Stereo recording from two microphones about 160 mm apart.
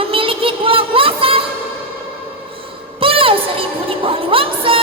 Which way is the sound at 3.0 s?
35° right (ahead or behind).